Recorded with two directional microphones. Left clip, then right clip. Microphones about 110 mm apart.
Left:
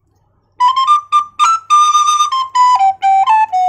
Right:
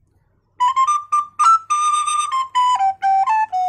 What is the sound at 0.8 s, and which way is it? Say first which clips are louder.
Flute: left 6 dB; 40° left (ahead or behind).